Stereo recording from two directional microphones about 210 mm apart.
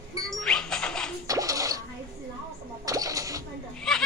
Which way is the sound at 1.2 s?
15° right (ahead or behind).